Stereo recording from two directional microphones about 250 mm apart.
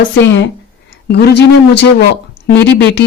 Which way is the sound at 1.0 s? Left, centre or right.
Left.